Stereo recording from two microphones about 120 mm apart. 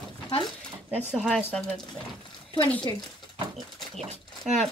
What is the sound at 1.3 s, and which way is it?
Speech, 10° left (ahead or behind).